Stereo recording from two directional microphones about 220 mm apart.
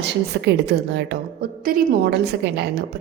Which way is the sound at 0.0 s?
50° right (ahead or behind).